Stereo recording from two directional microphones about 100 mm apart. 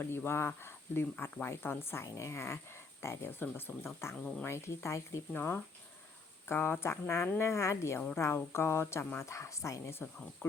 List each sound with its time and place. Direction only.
0.0 s speech: 20° left (ahead or behind)
4.2 s speech: 10° left (ahead or behind)
4.4 s speech: 30° left (ahead or behind)